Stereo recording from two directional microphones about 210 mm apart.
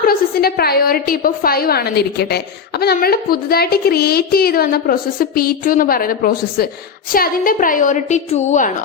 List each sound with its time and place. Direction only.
0.0 s a woman's voice: 45° left (ahead or behind)